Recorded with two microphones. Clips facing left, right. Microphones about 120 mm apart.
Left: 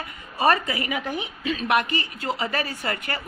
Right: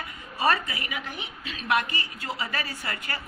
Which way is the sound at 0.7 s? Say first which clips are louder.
Left 8 dB; 90° left.